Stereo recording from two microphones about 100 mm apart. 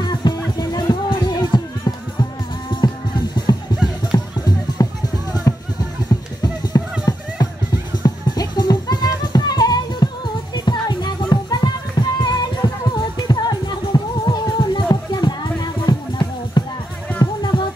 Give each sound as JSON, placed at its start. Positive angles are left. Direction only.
{"t": 0.2, "sound": "music", "side_deg": 50}